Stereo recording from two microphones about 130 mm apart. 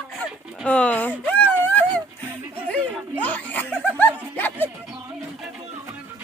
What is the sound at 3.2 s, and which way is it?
Snicker, 10° left (ahead or behind).